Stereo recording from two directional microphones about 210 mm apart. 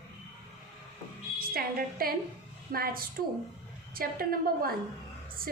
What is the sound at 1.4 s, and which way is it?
A woman's voice, 45° right (ahead or behind).